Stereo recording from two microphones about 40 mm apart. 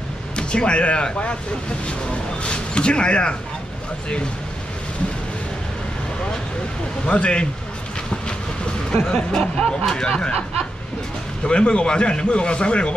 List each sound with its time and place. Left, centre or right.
0.4 s speech: left
2.4 s speech: left
7.1 s speech: left
9.0 s speech: left
11.4 s speech: left